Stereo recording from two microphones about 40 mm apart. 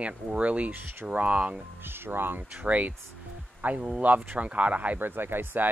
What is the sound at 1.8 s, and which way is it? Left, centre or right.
Speech, right.